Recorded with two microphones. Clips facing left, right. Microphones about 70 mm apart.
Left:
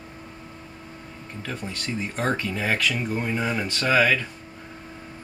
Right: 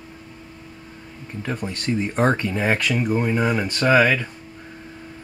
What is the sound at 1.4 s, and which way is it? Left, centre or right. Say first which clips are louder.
Speech: right 5 dB; centre.